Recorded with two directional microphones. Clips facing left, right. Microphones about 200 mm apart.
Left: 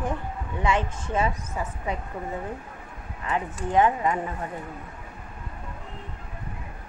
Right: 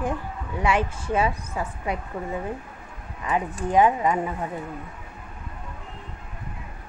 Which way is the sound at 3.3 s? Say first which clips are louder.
Right 2 dB; 15° right (ahead or behind).